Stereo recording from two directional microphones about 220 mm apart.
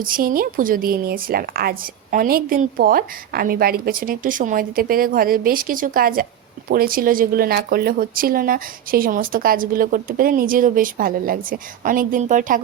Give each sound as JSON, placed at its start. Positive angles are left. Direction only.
{"t": 0.0, "sound": "a woman's voice", "side_deg": -40}